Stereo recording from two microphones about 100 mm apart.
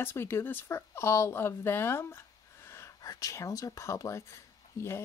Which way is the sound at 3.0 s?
35° left (ahead or behind).